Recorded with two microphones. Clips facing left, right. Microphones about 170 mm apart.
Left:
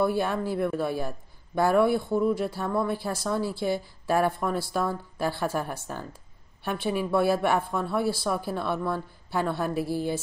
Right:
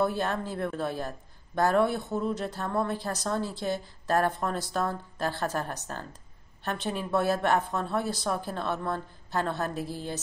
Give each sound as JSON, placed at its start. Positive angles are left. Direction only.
{"t": 0.0, "sound": "speech", "side_deg": 10}